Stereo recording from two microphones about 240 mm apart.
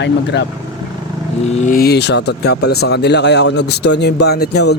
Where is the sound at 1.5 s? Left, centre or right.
Left.